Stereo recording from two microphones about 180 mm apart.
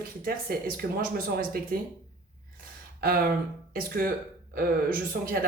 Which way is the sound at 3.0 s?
55° right (ahead or behind).